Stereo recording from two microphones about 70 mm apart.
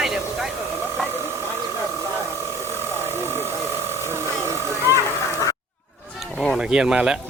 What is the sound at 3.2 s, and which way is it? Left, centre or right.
Vehicle, right.